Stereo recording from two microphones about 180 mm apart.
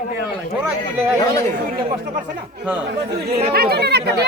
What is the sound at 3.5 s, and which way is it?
Speech, 60° right (ahead or behind).